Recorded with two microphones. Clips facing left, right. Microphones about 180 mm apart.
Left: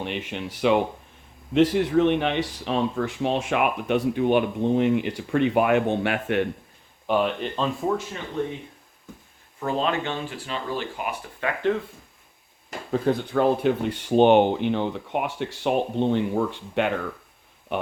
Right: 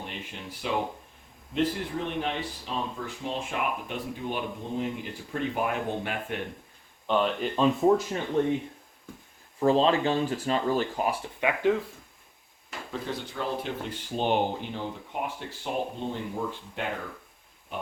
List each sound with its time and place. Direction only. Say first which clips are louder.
0.0 s speech: left 9 dB; 75° left (ahead or behind)
7.1 s speech: left 2 dB; 5° left (ahead or behind)
9.6 s speech: right 3 dB; 30° right (ahead or behind)
11.3 s speech: left 1 dB; 10° right (ahead or behind)
12.9 s speech: left 12 dB; 50° left (ahead or behind); by 16.9 s 75° left (ahead or behind)